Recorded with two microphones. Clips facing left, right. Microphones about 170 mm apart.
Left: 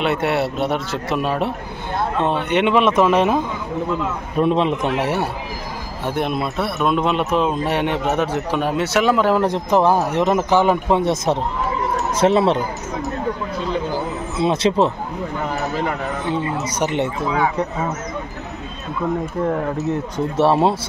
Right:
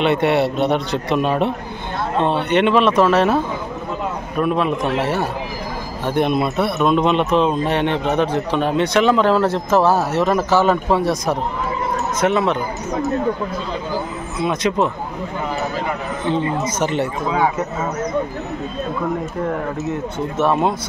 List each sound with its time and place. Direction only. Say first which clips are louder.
0.0 s speech: right 3 dB; 5° left (ahead or behind)
2.5 s speech: right 1 dB; 10° left (ahead or behind)
4.4 s speech: left 1 dB; 25° left (ahead or behind)
6.0 s speech: right 4 dB; centre (ahead or behind); by 12.5 s 30° left (ahead or behind)
14.4 s speech: left 2 dB; 30° left (ahead or behind)
16.7 s speech: left 3 dB; 15° left (ahead or behind)
20.3 s speech: left 2 dB; 30° left (ahead or behind)